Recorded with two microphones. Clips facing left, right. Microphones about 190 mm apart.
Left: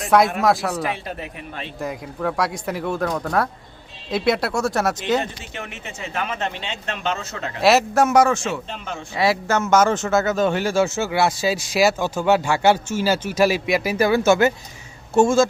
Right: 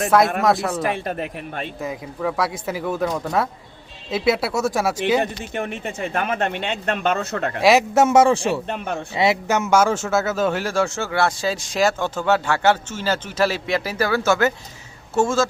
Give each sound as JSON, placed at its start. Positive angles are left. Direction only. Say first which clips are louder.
{"t": 0.0, "sound": "speech", "louder": "even", "side_deg": 0}
{"t": 0.9, "sound": "a man's voice", "louder": "right 5 dB", "side_deg": -50}
{"t": 1.8, "sound": "speech", "louder": "left 1 dB", "side_deg": 0}
{"t": 5.8, "sound": "a man's voice", "louder": "right 4 dB", "side_deg": -55}
{"t": 7.6, "sound": "a man's voice", "louder": "right 1 dB", "side_deg": -15}
{"t": 8.0, "sound": "a man's voice", "louder": "right 3 dB", "side_deg": -25}
{"t": 8.6, "sound": "a man's voice", "louder": "right 5 dB", "side_deg": -55}
{"t": 9.1, "sound": "a man's voice", "louder": "even", "side_deg": -20}